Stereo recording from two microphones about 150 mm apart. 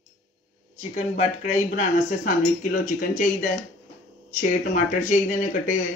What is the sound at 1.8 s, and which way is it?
Speech, 50° left (ahead or behind).